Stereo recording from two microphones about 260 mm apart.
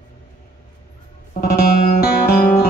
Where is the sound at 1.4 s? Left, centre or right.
Left.